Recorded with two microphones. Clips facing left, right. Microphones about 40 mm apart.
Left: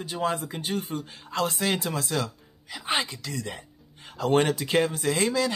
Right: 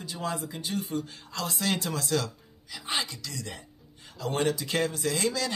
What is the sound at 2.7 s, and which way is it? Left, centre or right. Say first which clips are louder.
Speech: left 4 dB; left.